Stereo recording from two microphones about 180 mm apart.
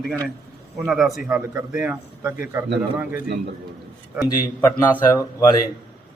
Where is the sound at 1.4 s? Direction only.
10° right (ahead or behind).